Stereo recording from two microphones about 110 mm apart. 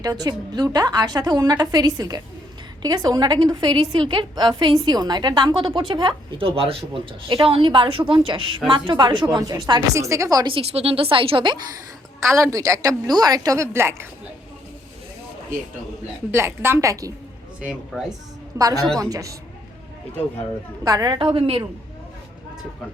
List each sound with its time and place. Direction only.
0.0 s a woman's voice: 35° right (ahead or behind)
9.9 s a woman's voice: 30° right (ahead or behind)
10.4 s speech: 60° right (ahead or behind)
12.2 s a woman's voice: 25° right (ahead or behind)
16.3 s a woman's voice: 25° right (ahead or behind)
17.6 s speech: 10° right (ahead or behind)
18.5 s a woman's voice: 35° right (ahead or behind)
20.8 s a woman's voice: 35° right (ahead or behind)
21.2 s a woman's voice: 50° right (ahead or behind)